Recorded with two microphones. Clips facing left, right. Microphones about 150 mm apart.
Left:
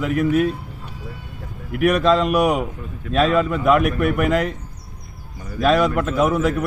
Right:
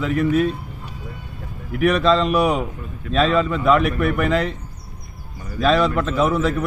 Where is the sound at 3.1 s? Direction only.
45° left (ahead or behind).